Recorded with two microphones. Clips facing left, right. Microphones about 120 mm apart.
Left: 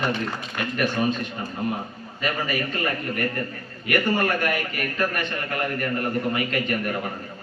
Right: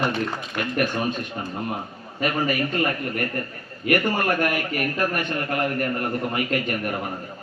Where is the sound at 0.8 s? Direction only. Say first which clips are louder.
Left 1 dB; 45° right (ahead or behind).